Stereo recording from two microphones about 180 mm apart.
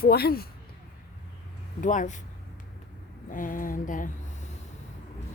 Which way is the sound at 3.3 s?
50° left (ahead or behind).